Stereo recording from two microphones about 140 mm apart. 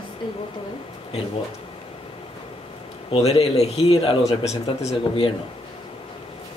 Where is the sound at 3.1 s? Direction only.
50° left (ahead or behind).